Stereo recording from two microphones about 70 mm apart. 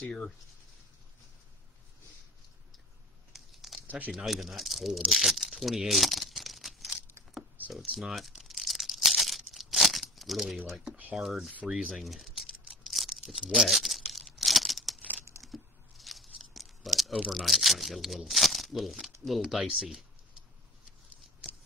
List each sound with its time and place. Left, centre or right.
0.0 s speech: centre
3.3 s a sound: centre
3.8 s crumpling: right
4.1 s speech: centre
7.9 s tearing: centre
11.1 s speech: centre
11.9 s a sound: centre
15.4 s tearing: centre
17.3 s speech: centre